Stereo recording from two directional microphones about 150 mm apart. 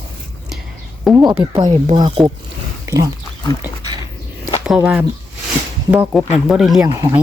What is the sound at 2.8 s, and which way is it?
Speech, 25° right (ahead or behind).